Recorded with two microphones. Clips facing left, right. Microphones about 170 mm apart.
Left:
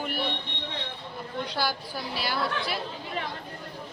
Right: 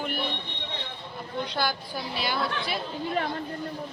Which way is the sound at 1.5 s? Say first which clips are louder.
Even; 5° left (ahead or behind).